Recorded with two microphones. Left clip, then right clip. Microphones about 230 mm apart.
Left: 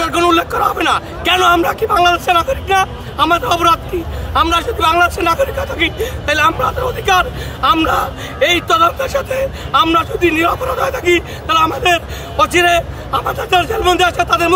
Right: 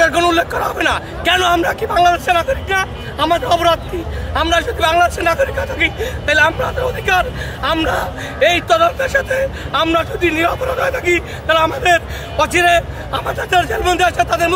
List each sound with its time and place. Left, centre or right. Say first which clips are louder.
0.0 s a man's voice: even; centre